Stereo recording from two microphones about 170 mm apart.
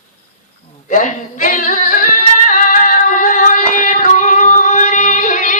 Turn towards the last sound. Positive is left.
turn(degrees=50)  # may be behind; listen again after turning